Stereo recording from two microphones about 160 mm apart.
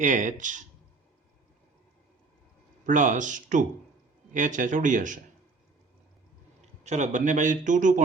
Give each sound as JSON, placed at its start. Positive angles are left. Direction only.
{"t": 0.0, "sound": "a man's voice", "side_deg": -50}
{"t": 2.8, "sound": "a man's voice", "side_deg": -50}
{"t": 6.8, "sound": "a man's voice", "side_deg": -50}